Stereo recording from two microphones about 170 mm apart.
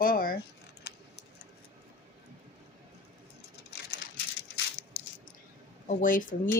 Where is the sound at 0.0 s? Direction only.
60° left (ahead or behind).